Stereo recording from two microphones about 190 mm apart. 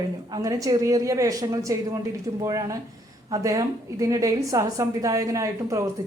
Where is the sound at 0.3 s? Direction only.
20° right (ahead or behind).